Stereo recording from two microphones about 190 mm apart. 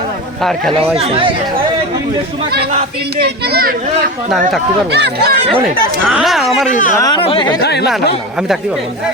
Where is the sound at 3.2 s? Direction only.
60° right (ahead or behind).